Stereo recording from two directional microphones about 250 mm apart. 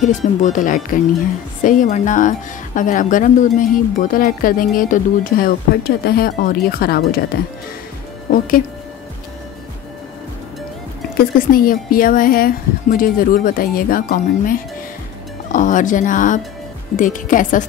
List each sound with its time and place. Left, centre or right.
0.0 s a woman's voice: left
8.3 s speech: left
11.1 s a woman's voice: left